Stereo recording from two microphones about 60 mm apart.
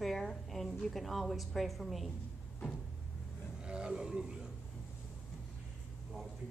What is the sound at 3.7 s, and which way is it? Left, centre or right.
Speech, centre.